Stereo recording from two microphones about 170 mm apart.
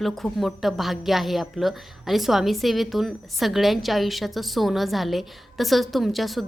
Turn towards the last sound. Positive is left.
turn(degrees=0)  # may be behind; listen again after turning